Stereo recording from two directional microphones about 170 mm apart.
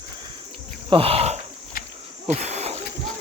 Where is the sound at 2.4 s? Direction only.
40° right (ahead or behind).